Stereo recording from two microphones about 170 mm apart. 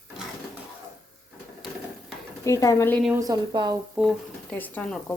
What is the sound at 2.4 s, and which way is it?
Speech, 20° left (ahead or behind).